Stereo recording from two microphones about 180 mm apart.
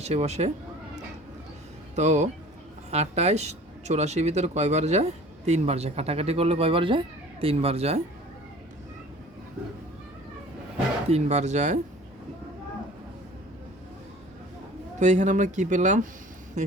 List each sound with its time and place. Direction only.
0.0 s speech: 35° right (ahead or behind)
2.0 s speech: 40° right (ahead or behind)
11.1 s speech: 40° right (ahead or behind)
14.9 s speech: 40° right (ahead or behind)